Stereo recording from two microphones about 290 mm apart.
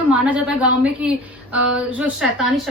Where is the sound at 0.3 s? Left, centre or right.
Centre.